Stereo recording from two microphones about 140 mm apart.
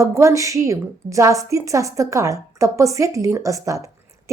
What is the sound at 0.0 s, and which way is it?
A woman's voice, 20° right (ahead or behind).